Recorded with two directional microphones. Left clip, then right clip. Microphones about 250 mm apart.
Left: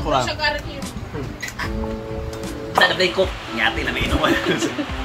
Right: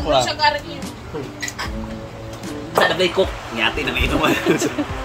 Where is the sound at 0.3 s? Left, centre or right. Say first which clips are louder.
Right 4 dB; right.